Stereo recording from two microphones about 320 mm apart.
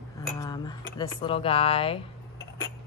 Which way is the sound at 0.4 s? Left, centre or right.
Centre.